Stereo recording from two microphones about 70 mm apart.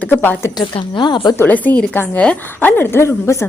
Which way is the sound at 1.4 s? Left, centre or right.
Left.